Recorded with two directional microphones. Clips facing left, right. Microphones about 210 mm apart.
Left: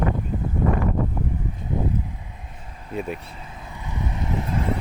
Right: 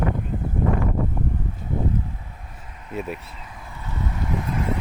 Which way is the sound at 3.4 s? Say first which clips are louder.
Left 1 dB; 20° left (ahead or behind).